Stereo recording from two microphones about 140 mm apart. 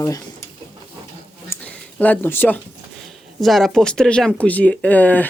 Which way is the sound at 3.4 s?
Centre (ahead or behind).